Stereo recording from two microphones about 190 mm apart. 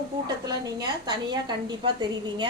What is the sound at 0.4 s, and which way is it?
A woman's voice, 20° right (ahead or behind).